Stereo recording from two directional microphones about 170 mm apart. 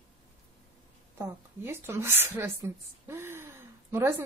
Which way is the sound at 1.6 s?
15° right (ahead or behind).